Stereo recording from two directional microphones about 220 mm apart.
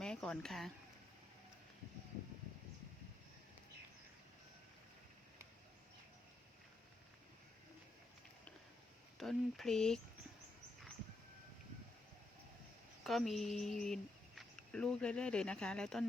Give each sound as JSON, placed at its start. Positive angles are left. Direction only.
{"t": 0.0, "sound": "a sound", "side_deg": 5}
{"t": 9.1, "sound": "speech", "side_deg": 0}
{"t": 13.1, "sound": "speech", "side_deg": 0}